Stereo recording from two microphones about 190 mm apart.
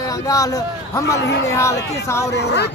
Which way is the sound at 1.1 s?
65° left (ahead or behind).